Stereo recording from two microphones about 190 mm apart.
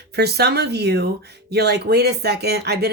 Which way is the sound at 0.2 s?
60° right (ahead or behind).